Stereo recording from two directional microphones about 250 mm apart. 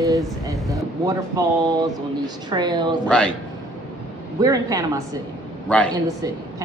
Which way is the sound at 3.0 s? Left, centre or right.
Centre.